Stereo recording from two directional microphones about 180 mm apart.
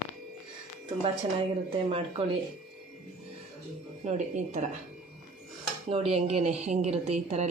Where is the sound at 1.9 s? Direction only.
35° right (ahead or behind).